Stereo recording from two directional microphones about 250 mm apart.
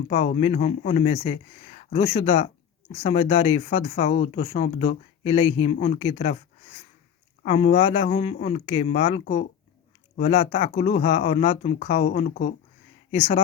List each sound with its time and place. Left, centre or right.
0.1 s speech: left
7.4 s speech: left